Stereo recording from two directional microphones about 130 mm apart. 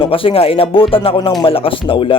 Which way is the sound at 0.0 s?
45° left (ahead or behind).